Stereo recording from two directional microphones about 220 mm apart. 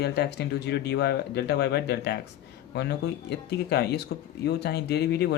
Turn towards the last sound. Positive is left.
turn(degrees=50)  # may be behind; listen again after turning